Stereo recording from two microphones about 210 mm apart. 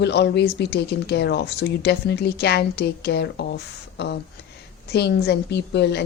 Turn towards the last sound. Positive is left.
turn(degrees=55)  # may be behind; listen again after turning